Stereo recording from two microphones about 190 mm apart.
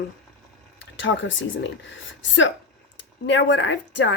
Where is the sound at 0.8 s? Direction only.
75° left (ahead or behind).